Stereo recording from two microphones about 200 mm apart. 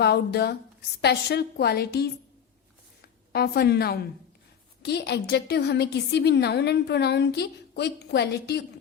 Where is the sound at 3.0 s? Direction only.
50° left (ahead or behind).